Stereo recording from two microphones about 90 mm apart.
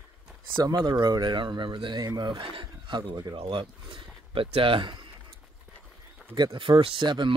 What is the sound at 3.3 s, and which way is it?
Speech, 75° right (ahead or behind).